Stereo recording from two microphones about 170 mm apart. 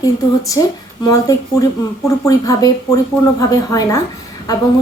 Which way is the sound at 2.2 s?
20° left (ahead or behind).